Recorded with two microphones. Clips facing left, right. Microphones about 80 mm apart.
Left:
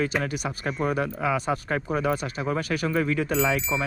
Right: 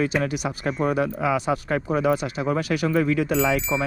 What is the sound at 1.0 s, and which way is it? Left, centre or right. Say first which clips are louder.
Speech: right 3 dB; right.